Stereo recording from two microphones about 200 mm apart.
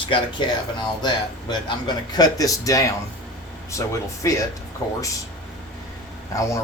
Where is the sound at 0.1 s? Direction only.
20° left (ahead or behind).